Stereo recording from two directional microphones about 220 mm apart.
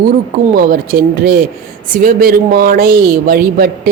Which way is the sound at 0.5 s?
40° right (ahead or behind).